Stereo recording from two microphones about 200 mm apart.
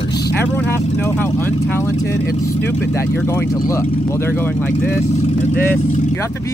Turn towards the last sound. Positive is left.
turn(degrees=10)  # may be behind; listen again after turning